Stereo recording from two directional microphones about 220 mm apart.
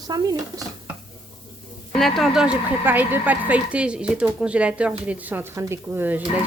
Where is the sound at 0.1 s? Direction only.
15° right (ahead or behind).